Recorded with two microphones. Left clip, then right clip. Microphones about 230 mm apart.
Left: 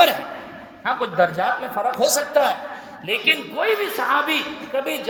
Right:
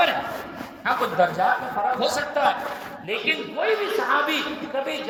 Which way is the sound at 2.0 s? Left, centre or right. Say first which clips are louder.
Left 6 dB; left.